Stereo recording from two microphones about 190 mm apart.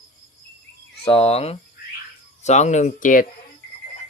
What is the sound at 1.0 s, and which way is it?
Speech, 30° left (ahead or behind).